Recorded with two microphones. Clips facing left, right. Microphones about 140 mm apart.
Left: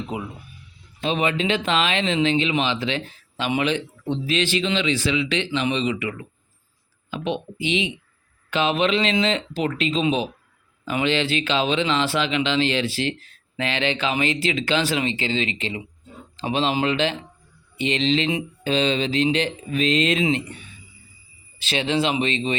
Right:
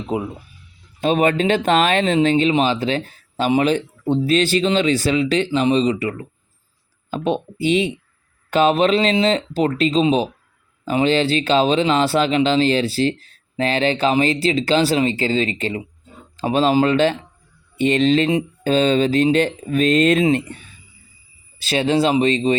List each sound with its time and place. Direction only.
0.1 s speech: 35° right (ahead or behind)
1.0 s speech: 45° right (ahead or behind)
21.6 s speech: 40° right (ahead or behind)